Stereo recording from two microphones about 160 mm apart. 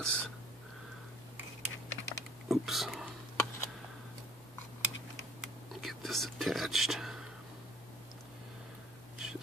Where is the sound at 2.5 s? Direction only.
Centre (ahead or behind).